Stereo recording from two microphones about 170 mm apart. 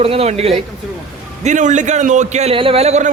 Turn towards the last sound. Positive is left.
turn(degrees=-40)  # may be behind; listen again after turning